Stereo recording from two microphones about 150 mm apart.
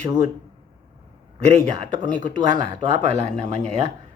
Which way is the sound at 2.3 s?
55° right (ahead or behind).